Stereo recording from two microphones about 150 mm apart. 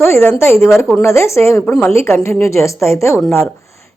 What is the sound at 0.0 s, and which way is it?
A woman's voice, 15° left (ahead or behind).